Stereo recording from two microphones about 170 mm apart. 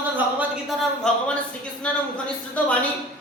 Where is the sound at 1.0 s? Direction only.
5° left (ahead or behind).